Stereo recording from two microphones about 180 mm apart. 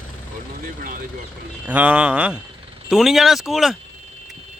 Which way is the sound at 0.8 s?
50° right (ahead or behind).